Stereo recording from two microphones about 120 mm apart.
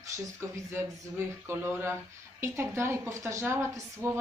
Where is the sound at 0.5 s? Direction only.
20° right (ahead or behind).